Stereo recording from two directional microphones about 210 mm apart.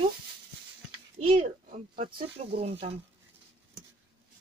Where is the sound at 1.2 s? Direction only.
35° right (ahead or behind).